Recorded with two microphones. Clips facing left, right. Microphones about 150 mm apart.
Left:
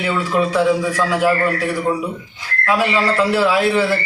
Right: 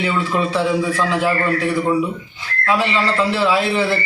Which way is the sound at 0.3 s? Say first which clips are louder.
Left 4 dB; 10° left (ahead or behind).